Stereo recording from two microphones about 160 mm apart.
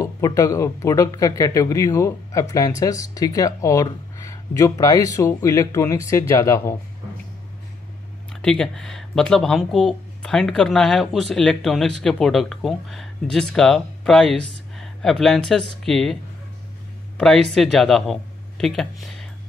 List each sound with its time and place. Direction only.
0.0 s speech: 20° left (ahead or behind)
8.3 s speech: 5° left (ahead or behind)
17.2 s speech: 5° left (ahead or behind)